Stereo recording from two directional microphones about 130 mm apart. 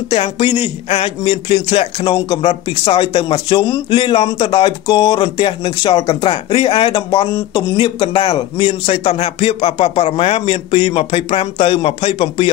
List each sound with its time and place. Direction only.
0.1 s a man's voice: 55° left (ahead or behind); by 2.4 s 40° left (ahead or behind)
2.4 s a man's voice: 50° left (ahead or behind)